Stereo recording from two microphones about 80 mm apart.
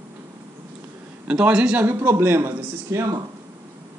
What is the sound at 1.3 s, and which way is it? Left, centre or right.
Speech, centre.